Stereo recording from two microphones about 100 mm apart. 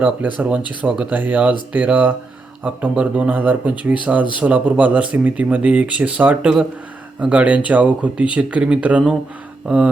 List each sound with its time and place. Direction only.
0.3 s speech: 15° right (ahead or behind)